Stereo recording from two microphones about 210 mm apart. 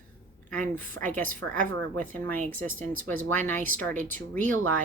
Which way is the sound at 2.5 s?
10° left (ahead or behind).